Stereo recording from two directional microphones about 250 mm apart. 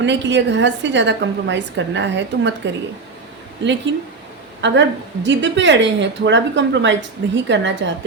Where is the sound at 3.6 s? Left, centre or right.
Right.